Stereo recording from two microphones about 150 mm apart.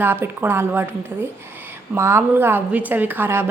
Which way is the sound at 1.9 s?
15° right (ahead or behind).